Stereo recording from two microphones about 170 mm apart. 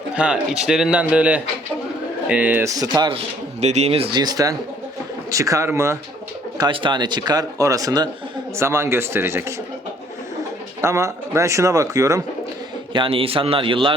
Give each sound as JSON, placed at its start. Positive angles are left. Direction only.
{"t": 0.1, "sound": "a man's voice", "side_deg": -5}
{"t": 6.6, "sound": "a man's voice", "side_deg": -25}
{"t": 10.8, "sound": "speech", "side_deg": -15}
{"t": 12.9, "sound": "a man's voice", "side_deg": -30}